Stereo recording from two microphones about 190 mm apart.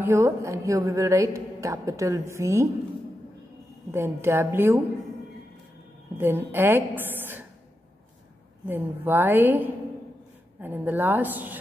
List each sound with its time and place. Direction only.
0.0 s a woman's voice: 15° right (ahead or behind)
3.9 s a woman's voice: 15° right (ahead or behind)
6.1 s a woman's voice: 10° right (ahead or behind)
8.6 s a woman's voice: 10° right (ahead or behind)